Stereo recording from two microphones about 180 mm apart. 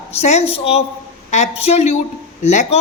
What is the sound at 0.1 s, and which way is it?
A man's voice, 35° left (ahead or behind).